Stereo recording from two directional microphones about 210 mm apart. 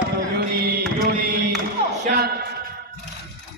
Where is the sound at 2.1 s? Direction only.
50° right (ahead or behind).